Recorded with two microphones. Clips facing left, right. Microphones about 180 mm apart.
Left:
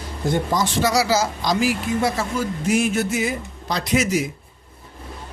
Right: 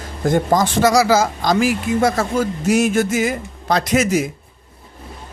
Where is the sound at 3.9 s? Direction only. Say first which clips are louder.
Right 2 dB; 50° right (ahead or behind).